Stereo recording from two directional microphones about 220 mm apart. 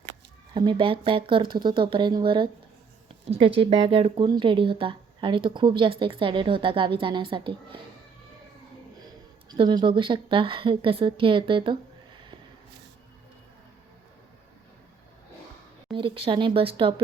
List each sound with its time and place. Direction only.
0.5 s speech: 20° right (ahead or behind)
9.5 s speech: 20° right (ahead or behind)
16.0 s speech: 25° right (ahead or behind)